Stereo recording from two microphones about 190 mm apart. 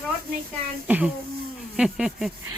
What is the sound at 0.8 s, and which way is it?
Speech, 10° right (ahead or behind).